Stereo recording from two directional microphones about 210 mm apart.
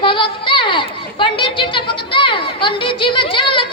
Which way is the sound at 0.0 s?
25° left (ahead or behind).